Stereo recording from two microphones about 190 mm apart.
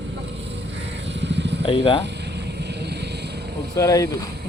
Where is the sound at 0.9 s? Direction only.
65° right (ahead or behind).